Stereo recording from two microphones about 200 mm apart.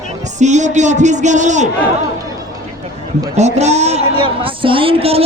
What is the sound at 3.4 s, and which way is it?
Speech, 35° right (ahead or behind).